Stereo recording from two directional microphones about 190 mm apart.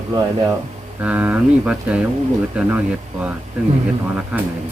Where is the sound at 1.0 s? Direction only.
10° right (ahead or behind).